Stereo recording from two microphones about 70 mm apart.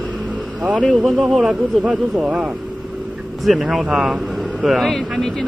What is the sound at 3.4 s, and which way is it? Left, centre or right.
Speech, centre.